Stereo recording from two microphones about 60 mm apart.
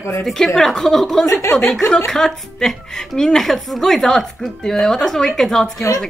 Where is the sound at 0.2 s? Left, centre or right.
Centre.